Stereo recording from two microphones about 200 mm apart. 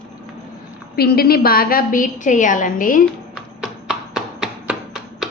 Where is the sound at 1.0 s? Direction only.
50° left (ahead or behind).